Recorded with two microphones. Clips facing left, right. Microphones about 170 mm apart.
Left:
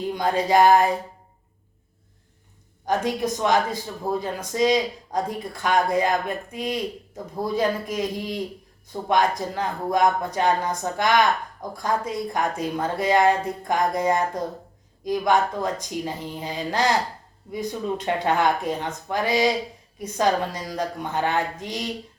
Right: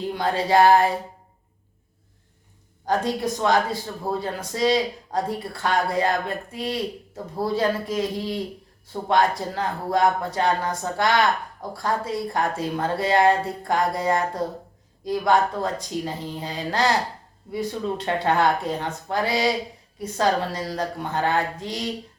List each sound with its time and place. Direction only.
0.1 s speech: 20° left (ahead or behind)
2.8 s speech: 20° left (ahead or behind)